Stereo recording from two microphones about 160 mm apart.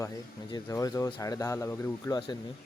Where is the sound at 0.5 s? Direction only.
20° left (ahead or behind).